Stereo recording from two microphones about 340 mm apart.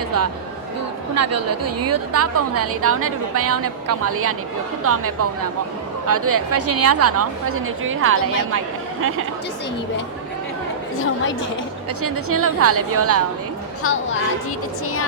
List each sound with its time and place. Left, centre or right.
1.1 s a woman's voice: right
12.0 s a woman's voice: right
13.8 s a woman's voice: left